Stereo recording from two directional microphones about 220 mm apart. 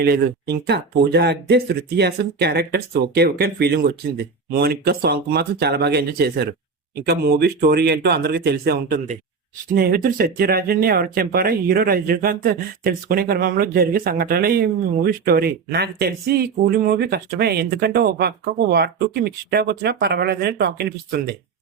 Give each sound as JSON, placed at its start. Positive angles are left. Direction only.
{"t": 0.0, "sound": "speech", "side_deg": -45}